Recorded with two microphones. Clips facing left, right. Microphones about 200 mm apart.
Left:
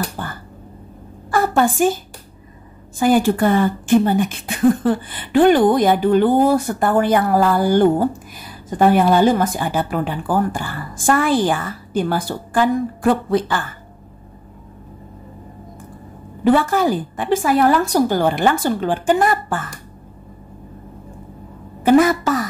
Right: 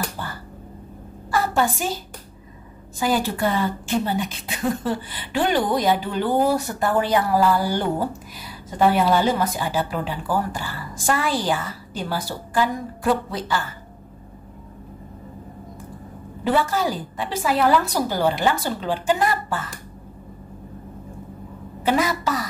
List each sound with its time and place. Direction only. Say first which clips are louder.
0.2 s finger snapping: left 4 dB; 50° left (ahead or behind)
1.3 s a woman's voice: left 5 dB; 50° left (ahead or behind)
3.0 s speech: left 7 dB; 50° left (ahead or behind)
16.4 s speech: left 6 dB; 55° left (ahead or behind)
21.8 s a sound: left 8 dB; 50° left (ahead or behind)